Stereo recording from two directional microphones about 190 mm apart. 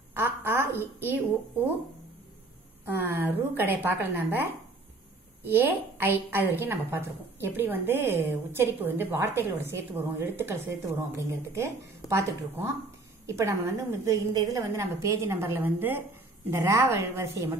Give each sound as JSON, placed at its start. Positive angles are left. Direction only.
{"t": 0.1, "sound": "a woman's voice", "side_deg": -10}
{"t": 2.8, "sound": "a woman's voice", "side_deg": -10}